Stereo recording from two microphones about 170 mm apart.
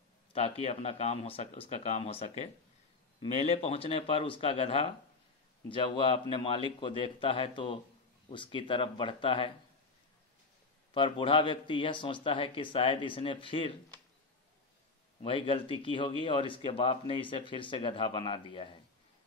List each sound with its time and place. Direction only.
0.3 s speech: 35° left (ahead or behind)
10.9 s speech: 30° left (ahead or behind)
15.2 s speech: 30° left (ahead or behind)